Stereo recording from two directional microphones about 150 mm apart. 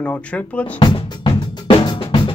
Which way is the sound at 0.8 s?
30° left (ahead or behind).